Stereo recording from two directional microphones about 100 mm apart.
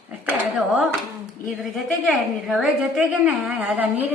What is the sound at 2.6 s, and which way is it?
A woman's voice, 10° right (ahead or behind).